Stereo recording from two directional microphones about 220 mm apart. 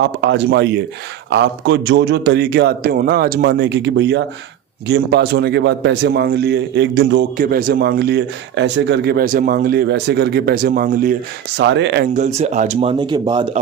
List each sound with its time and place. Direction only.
0.2 s a man's voice: 55° right (ahead or behind)
12.1 s speech: 30° right (ahead or behind)